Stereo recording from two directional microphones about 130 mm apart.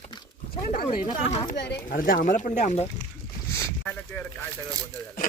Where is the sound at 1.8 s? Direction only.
90° left.